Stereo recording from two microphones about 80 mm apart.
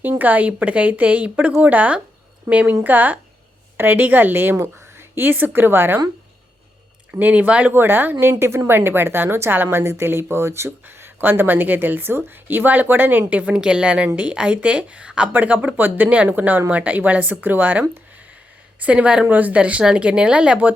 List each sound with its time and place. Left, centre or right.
0.0 s a woman's voice: right
7.1 s a woman's voice: right